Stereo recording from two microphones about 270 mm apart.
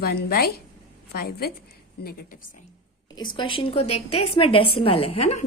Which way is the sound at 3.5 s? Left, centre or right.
Left.